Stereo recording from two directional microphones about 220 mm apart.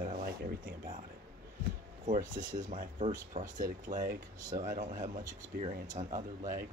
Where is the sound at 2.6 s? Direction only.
35° right (ahead or behind).